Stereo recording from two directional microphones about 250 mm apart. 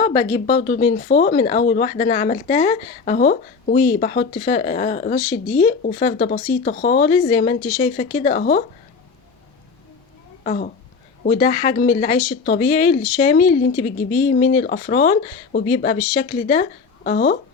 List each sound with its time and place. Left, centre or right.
0.0 s speech: left
10.4 s speech: left
14.5 s speech: left